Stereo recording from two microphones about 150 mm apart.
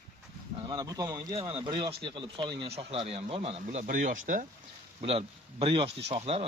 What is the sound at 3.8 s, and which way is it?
Speech, 65° right (ahead or behind).